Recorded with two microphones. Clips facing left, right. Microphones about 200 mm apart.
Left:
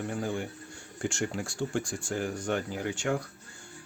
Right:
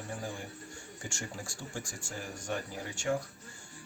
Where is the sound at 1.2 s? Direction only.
80° left.